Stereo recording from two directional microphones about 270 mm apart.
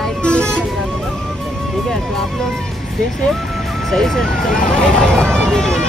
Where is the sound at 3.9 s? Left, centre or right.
Centre.